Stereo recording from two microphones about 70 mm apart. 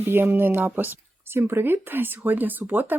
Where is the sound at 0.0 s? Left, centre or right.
Right.